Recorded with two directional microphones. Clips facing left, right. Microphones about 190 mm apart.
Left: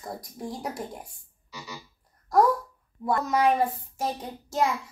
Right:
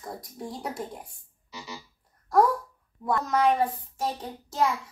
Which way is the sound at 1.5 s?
25° right (ahead or behind).